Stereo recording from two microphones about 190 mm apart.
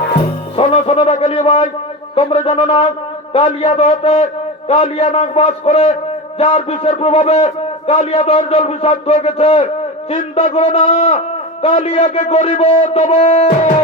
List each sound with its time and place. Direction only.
0.5 s music: 30° left (ahead or behind)
2.1 s a man's voice: 30° left (ahead or behind)